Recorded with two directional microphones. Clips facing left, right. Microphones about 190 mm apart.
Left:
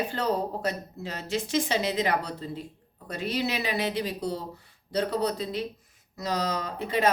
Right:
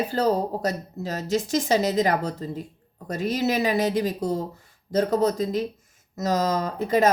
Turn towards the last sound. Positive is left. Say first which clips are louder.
# right 7 dB
turn(degrees=-45)  # may be behind; listen again after turning